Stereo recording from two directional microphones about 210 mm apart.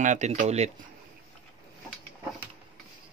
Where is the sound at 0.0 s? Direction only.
35° right (ahead or behind).